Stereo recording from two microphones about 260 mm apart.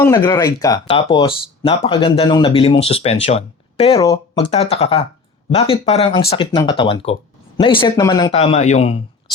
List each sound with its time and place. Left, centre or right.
0.0 s speech: centre